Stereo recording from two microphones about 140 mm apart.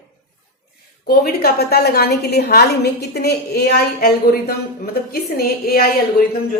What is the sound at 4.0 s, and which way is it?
A woman's voice, 90° left.